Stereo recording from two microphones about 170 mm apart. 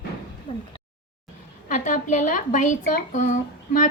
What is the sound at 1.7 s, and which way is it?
Speech, 45° left (ahead or behind).